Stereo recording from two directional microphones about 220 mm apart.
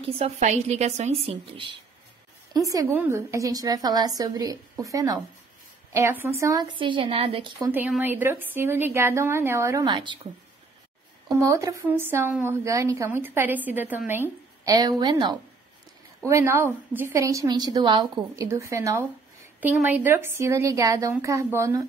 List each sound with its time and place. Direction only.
0.2 s a woman's voice: 30° right (ahead or behind)
7.6 s a woman's voice: 10° right (ahead or behind)
11.2 s a woman's voice: 15° right (ahead or behind)